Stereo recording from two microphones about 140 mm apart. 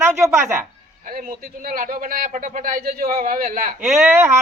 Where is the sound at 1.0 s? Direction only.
80° right.